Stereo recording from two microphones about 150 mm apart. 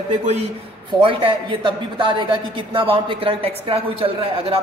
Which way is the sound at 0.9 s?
35° right (ahead or behind).